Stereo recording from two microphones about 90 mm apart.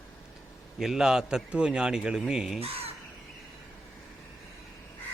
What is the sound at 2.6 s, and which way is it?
Speech, 90° right.